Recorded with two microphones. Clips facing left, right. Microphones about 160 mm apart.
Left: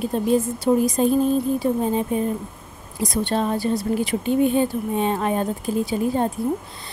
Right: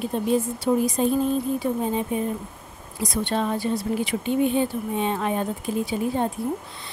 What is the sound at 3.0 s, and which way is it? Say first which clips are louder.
Speech: left 3 dB; 35° left (ahead or behind).